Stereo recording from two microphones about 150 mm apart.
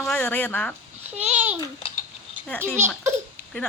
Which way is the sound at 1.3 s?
10° right (ahead or behind).